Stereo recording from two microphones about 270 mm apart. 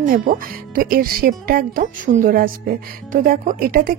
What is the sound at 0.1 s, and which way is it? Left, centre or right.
Speech, right.